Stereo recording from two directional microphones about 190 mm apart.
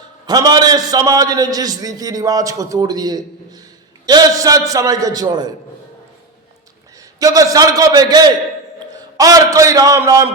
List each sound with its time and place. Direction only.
0.3 s a man's voice: 20° right (ahead or behind)
7.2 s a man's voice: 20° right (ahead or behind)